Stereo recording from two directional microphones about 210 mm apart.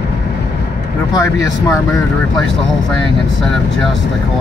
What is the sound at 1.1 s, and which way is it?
Speech, 15° left (ahead or behind).